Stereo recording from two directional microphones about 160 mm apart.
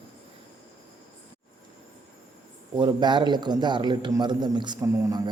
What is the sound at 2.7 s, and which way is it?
A man's voice, 30° right (ahead or behind).